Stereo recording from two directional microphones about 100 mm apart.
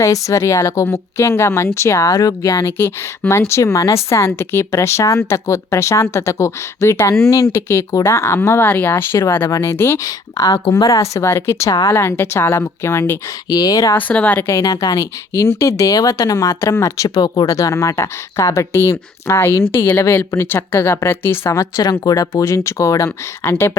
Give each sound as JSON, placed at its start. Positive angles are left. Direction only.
{"t": 0.0, "sound": "speech", "side_deg": 30}
{"t": 13.5, "sound": "speech", "side_deg": 40}
{"t": 13.9, "sound": "a woman's voice", "side_deg": 15}
{"t": 14.4, "sound": "speech", "side_deg": 30}